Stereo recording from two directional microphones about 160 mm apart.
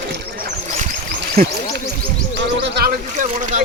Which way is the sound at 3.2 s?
55° right (ahead or behind).